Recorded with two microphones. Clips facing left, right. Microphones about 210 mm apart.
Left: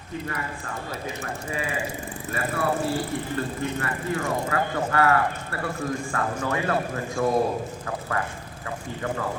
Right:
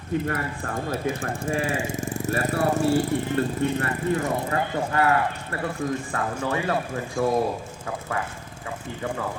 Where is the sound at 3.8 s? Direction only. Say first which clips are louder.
Right 3 dB; 20° right (ahead or behind).